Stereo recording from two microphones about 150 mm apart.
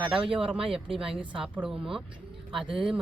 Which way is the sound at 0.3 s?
35° right (ahead or behind).